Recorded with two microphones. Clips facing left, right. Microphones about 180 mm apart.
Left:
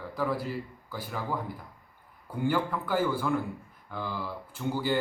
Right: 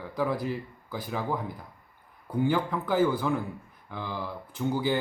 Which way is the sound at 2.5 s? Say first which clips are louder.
Right 2 dB; 15° right (ahead or behind).